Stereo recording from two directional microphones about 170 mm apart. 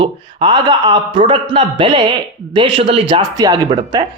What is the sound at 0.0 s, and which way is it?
A man's voice, 30° right (ahead or behind).